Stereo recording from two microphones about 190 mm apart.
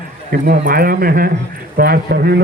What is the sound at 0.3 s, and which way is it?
A man's voice, 55° right (ahead or behind).